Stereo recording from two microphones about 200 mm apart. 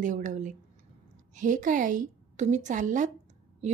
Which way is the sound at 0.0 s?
40° right (ahead or behind).